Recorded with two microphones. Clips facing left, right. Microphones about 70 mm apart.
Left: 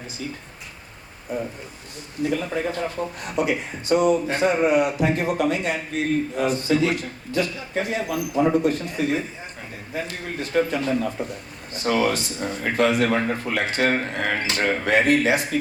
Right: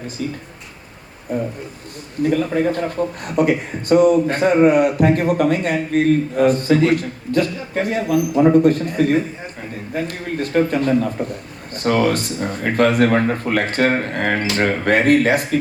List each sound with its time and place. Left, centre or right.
2.2 s speech: right